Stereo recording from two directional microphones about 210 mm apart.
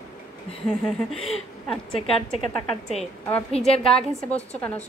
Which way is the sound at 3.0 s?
5° left (ahead or behind).